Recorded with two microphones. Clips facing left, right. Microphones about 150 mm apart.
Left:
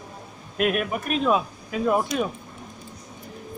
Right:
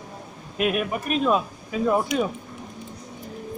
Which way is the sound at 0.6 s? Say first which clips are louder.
Even; centre (ahead or behind).